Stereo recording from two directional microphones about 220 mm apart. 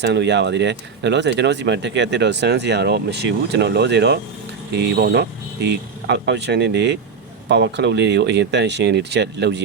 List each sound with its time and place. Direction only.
0.0 s speech: 50° right (ahead or behind)